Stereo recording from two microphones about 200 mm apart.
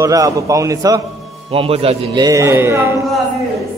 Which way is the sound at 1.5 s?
30° right (ahead or behind).